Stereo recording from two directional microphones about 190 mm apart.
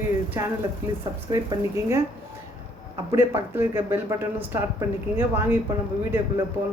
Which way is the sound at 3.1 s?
15° right (ahead or behind).